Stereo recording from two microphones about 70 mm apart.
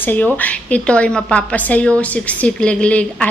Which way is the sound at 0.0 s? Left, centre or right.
Left.